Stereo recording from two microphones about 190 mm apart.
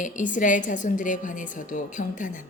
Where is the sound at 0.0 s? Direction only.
40° left (ahead or behind).